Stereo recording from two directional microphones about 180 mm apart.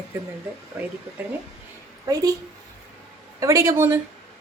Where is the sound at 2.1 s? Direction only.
20° right (ahead or behind).